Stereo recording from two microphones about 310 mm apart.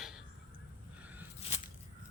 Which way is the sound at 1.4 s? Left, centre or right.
Left.